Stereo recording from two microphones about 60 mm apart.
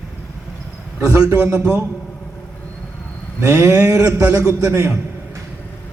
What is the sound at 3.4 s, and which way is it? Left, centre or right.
A man's voice, right.